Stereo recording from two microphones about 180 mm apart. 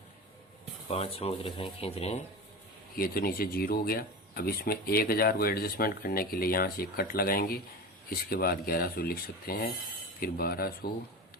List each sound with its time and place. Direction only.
0.9 s speech: 35° left (ahead or behind)
3.0 s speech: 55° left (ahead or behind)